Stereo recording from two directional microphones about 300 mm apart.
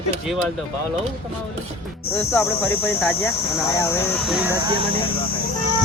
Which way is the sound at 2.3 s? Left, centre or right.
Centre.